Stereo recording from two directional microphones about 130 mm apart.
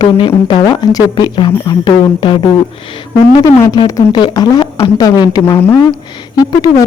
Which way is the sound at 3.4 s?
25° left (ahead or behind).